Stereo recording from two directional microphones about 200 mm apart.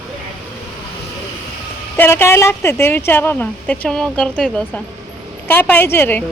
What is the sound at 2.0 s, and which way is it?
Speech, 10° left (ahead or behind).